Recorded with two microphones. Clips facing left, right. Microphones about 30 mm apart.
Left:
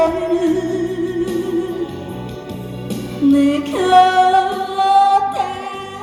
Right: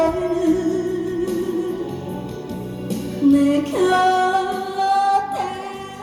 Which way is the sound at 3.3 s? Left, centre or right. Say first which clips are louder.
Left 2 dB; left.